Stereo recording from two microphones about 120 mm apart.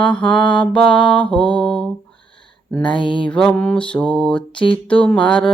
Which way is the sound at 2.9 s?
40° left (ahead or behind).